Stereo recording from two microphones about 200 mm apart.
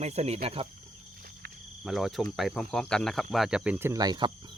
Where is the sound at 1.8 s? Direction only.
Centre (ahead or behind); by 4.3 s 20° right (ahead or behind).